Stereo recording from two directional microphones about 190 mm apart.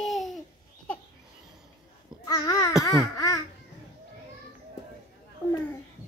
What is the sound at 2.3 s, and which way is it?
Babbling, 20° left (ahead or behind).